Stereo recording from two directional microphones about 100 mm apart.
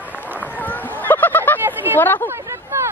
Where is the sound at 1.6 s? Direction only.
25° right (ahead or behind).